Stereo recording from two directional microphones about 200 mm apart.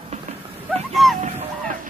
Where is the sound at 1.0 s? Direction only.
Centre (ahead or behind).